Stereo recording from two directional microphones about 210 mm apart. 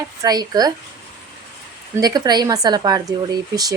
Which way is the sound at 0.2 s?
20° right (ahead or behind).